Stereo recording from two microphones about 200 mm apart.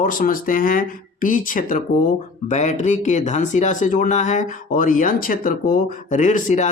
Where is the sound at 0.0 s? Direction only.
45° left (ahead or behind).